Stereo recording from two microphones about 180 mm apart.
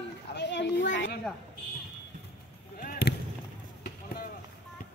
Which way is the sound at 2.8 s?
65° left (ahead or behind).